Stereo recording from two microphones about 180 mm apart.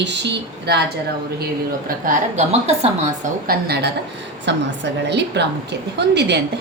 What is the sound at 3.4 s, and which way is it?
Speech, 65° right (ahead or behind).